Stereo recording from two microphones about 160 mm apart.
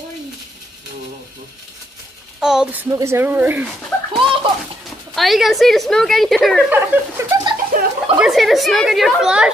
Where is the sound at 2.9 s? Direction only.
20° right (ahead or behind).